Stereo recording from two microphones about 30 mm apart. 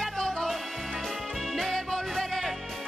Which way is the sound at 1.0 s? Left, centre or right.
Centre.